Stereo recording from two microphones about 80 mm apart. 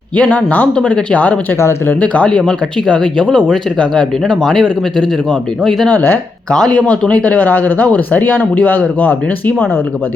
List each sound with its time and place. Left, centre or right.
0.2 s speech: centre
1.5 s speech: left
2.0 s speech: centre
5.9 s speech: left
6.5 s speech: centre